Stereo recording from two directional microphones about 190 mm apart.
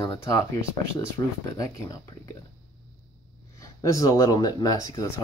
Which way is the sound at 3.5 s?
15° left (ahead or behind).